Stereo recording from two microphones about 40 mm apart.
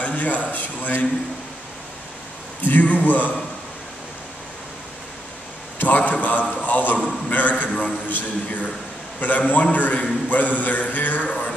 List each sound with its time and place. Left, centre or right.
0.0 s a man's voice: left
2.6 s a man's voice: left
5.8 s a man's voice: left